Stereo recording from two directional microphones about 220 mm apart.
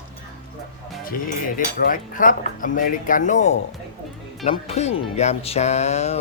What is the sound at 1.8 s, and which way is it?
Speech, 40° left (ahead or behind).